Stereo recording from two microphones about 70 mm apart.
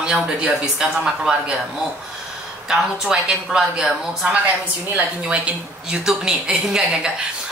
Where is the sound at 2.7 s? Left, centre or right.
Centre.